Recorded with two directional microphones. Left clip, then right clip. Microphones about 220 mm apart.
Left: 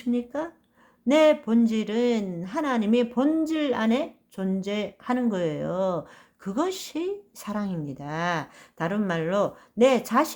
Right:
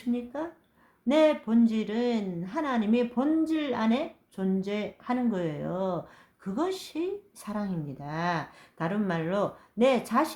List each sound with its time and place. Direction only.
0.1 s speech: 35° left (ahead or behind)